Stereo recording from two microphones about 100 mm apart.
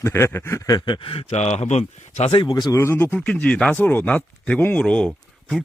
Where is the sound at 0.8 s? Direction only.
50° left (ahead or behind); by 2.3 s 90° left.